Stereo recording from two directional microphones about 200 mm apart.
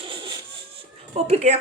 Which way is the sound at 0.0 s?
25° right (ahead or behind).